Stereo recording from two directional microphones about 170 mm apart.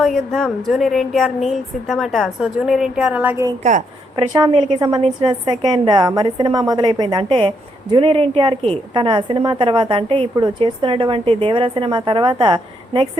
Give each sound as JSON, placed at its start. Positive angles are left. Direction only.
{"t": 0.0, "sound": "a woman's voice", "side_deg": 0}
{"t": 3.6, "sound": "a woman's voice", "side_deg": -45}
{"t": 4.3, "sound": "a woman's voice", "side_deg": -25}